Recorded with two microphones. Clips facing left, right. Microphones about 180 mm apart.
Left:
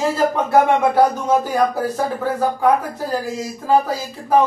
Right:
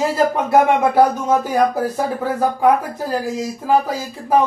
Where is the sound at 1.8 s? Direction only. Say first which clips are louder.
Even; 10° right (ahead or behind).